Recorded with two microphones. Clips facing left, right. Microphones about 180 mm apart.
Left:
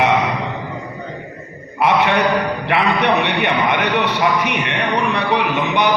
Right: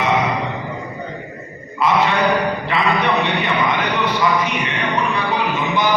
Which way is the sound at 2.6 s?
65° left (ahead or behind).